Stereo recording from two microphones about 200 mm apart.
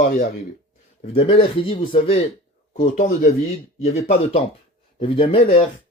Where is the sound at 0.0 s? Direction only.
45° left (ahead or behind).